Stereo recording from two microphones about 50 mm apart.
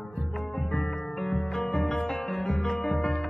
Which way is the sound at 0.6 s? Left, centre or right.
Left.